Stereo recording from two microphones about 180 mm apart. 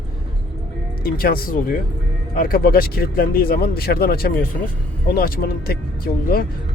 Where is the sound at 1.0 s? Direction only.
55° left (ahead or behind).